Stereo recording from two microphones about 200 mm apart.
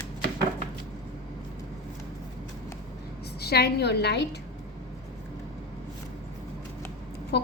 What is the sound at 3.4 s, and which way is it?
Speech, 55° left (ahead or behind).